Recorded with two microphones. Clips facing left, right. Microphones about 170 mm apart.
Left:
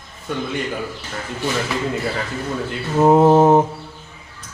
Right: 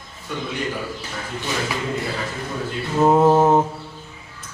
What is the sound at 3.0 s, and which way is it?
Mantra, 15° left (ahead or behind).